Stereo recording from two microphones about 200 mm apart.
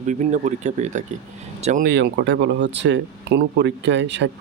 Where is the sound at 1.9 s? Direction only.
60° right (ahead or behind).